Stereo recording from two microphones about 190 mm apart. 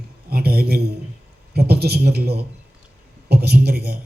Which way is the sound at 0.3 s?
55° right (ahead or behind).